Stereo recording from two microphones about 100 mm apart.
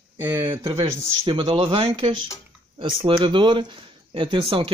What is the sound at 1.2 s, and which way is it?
Speech, 55° right (ahead or behind).